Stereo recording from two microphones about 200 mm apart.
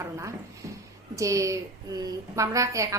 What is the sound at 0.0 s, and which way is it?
A woman's voice, 15° right (ahead or behind).